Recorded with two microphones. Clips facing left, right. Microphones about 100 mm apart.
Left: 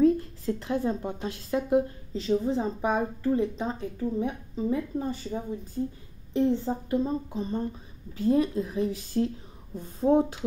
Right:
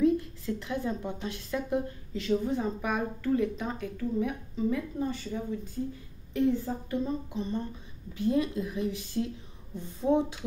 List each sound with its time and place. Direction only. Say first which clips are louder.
0.0 s a woman's voice: left 3 dB; 35° left (ahead or behind)
7.1 s a woman's voice: left 2 dB; 35° left (ahead or behind)